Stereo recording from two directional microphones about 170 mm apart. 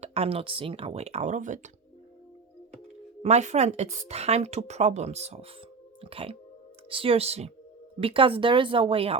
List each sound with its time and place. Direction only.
0.0 s speech: 35° right (ahead or behind)
3.2 s speech: 40° right (ahead or behind)